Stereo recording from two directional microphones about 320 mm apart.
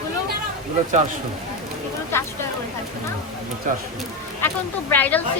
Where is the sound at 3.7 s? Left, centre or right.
Right.